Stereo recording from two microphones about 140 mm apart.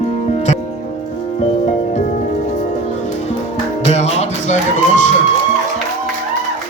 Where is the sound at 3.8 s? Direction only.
50° left (ahead or behind).